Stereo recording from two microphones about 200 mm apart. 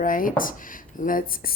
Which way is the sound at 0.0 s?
45° left (ahead or behind).